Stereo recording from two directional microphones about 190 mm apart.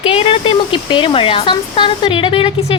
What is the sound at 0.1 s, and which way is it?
Speech, 25° left (ahead or behind).